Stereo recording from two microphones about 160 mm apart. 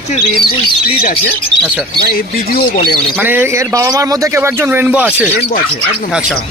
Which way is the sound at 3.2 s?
15° right (ahead or behind).